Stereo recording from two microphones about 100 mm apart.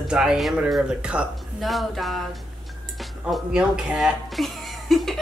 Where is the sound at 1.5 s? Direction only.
Centre (ahead or behind).